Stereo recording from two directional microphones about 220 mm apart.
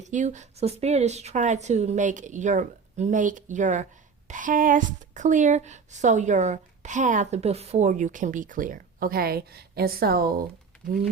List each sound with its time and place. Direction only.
0.0 s a woman's voice: 35° right (ahead or behind)